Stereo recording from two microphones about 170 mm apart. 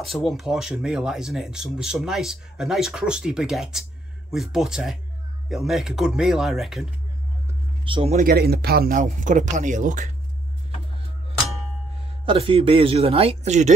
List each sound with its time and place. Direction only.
0.0 s speech: centre (ahead or behind)
7.8 s speech: 30° right (ahead or behind)
8.2 s speech: 65° right (ahead or behind); by 10.1 s 50° right (ahead or behind)
12.3 s speech: 35° right (ahead or behind)